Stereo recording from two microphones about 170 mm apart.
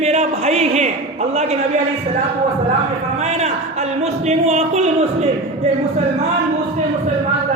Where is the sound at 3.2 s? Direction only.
40° right (ahead or behind).